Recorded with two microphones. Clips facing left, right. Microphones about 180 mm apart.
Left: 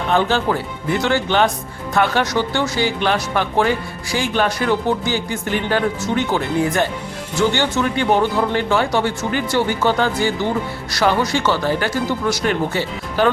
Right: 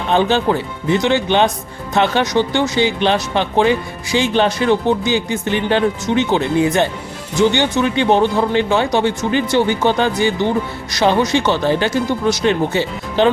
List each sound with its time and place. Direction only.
0.1 s speech: 20° right (ahead or behind)